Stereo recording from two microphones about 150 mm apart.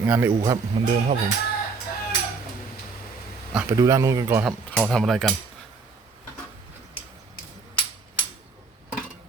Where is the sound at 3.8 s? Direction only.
20° right (ahead or behind).